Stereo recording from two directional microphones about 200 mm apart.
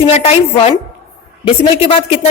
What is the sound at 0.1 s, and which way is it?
Speech, 35° left (ahead or behind).